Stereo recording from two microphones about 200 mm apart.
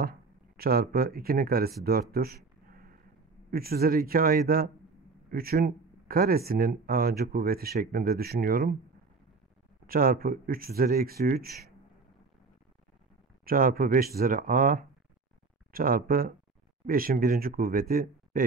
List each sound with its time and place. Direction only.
0.6 s speech: 50° right (ahead or behind)
9.8 s speech: 45° right (ahead or behind)
13.5 s speech: 45° right (ahead or behind)